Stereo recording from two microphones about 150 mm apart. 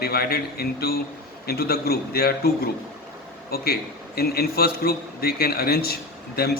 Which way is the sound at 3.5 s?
90° left.